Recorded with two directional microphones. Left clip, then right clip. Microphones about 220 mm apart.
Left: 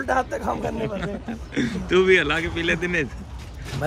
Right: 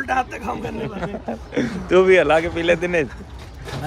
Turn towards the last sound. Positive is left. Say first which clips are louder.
# right 5 dB
turn(degrees=15)  # may be behind; listen again after turning